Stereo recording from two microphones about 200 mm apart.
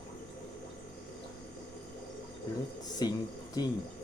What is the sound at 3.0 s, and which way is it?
Speech, 20° left (ahead or behind).